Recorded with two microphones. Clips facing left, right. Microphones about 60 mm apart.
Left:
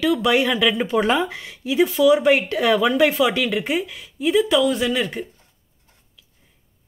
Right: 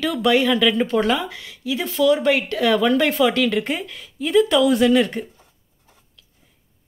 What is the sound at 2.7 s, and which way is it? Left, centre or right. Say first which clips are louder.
Speech: left 1 dB; centre.